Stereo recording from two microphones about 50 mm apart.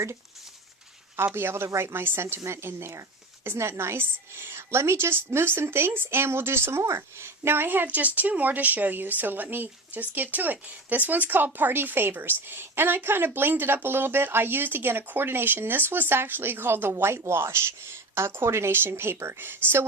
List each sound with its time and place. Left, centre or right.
1.1 s a woman's voice: right
7.9 s a woman's voice: right